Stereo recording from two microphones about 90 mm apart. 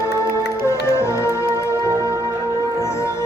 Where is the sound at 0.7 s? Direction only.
30° left (ahead or behind).